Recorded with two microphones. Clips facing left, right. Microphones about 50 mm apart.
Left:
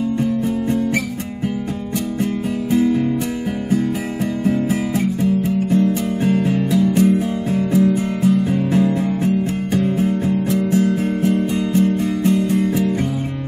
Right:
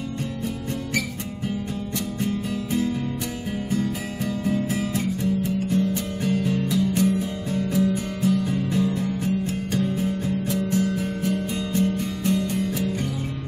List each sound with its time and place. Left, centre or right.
2.7 s music: left
4.9 s music: left